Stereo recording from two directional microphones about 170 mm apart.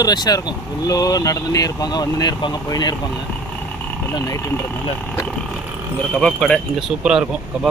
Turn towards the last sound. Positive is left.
turn(degrees=-5)  # may be behind; listen again after turning